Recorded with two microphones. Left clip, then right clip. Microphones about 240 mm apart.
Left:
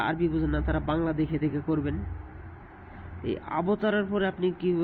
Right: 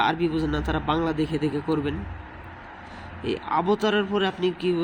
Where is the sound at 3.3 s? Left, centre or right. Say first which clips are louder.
Right 5 dB; centre.